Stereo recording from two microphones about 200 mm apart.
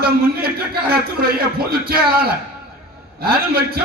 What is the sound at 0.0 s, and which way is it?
A man's voice, 50° right (ahead or behind).